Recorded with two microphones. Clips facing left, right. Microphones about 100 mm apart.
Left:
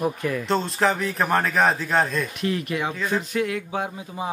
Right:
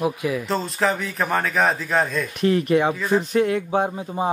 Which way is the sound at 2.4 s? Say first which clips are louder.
Right 12 dB; 35° right (ahead or behind).